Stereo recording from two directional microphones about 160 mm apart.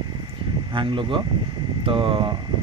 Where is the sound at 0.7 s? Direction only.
30° right (ahead or behind).